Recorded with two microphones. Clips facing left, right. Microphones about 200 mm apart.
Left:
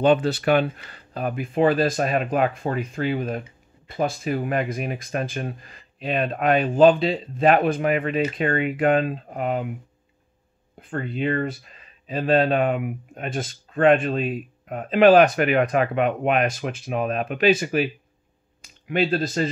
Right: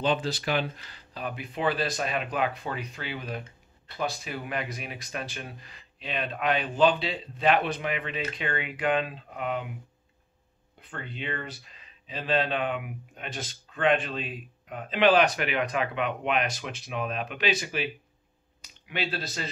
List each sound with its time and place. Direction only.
0.0 s speech: 60° left (ahead or behind); by 9.8 s 40° left (ahead or behind)
10.8 s speech: 45° left (ahead or behind)
18.9 s speech: 45° left (ahead or behind)